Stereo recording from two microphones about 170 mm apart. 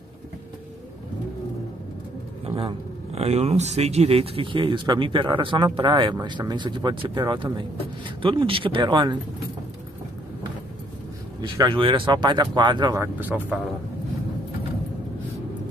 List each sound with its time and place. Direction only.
2.4 s speech: 35° right (ahead or behind)
11.4 s speech: 25° right (ahead or behind)
13.0 s speech: 10° right (ahead or behind)